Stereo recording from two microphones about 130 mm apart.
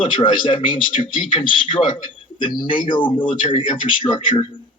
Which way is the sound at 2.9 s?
40° left (ahead or behind).